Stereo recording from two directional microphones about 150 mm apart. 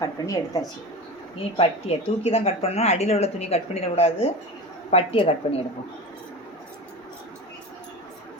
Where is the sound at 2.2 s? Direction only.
45° left (ahead or behind).